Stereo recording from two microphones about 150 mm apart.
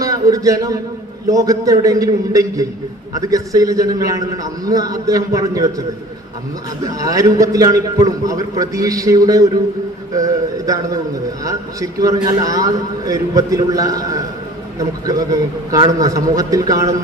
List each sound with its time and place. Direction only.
0.0 s a man's voice: 25° right (ahead or behind)
7.0 s a man's voice: 20° right (ahead or behind)